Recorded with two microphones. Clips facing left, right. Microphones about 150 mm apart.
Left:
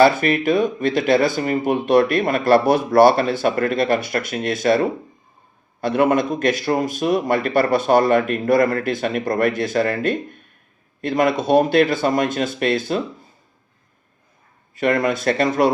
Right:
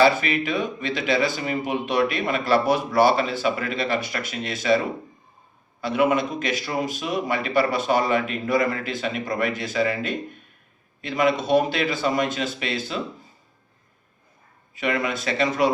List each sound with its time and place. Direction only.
0.0 s speech: 50° left (ahead or behind)
14.8 s speech: 50° left (ahead or behind)